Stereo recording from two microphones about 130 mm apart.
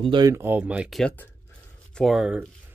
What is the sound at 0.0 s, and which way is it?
Speech, 40° right (ahead or behind).